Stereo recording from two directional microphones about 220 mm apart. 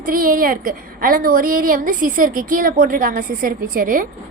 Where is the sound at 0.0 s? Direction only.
40° right (ahead or behind).